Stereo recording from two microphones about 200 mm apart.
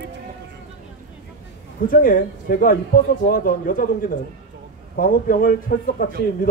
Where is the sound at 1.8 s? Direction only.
45° left (ahead or behind).